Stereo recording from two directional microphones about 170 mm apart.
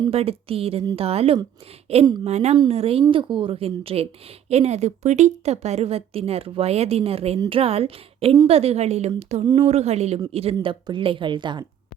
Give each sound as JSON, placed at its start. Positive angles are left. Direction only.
{"t": 0.1, "sound": "a woman's voice", "side_deg": -35}